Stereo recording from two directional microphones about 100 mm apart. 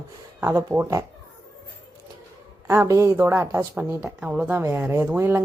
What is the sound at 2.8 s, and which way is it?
Speech, 30° right (ahead or behind).